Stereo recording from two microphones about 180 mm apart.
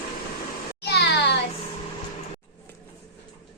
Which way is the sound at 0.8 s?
70° left (ahead or behind).